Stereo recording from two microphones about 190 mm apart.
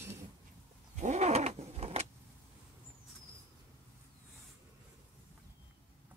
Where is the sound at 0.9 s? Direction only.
40° right (ahead or behind).